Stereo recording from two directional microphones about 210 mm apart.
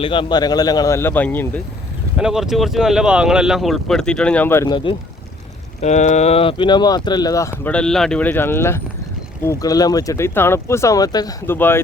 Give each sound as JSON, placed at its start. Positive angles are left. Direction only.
{"t": 0.0, "sound": "speech", "side_deg": 25}
{"t": 2.1, "sound": "speech", "side_deg": -5}
{"t": 5.8, "sound": "speech", "side_deg": 35}
{"t": 7.6, "sound": "speech", "side_deg": 5}